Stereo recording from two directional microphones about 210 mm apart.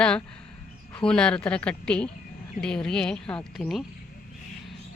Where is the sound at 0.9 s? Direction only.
5° left (ahead or behind).